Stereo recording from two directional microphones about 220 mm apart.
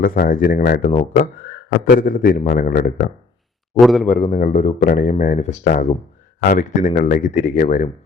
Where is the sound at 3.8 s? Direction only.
Centre (ahead or behind).